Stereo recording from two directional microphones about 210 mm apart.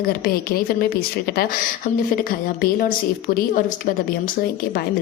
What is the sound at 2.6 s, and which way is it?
Speech, 45° left (ahead or behind).